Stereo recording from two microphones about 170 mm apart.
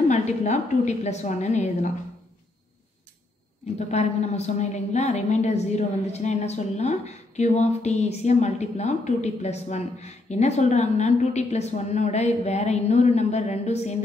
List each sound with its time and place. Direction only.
0.1 s a woman's voice: 45° left (ahead or behind)
3.7 s a woman's voice: 40° left (ahead or behind)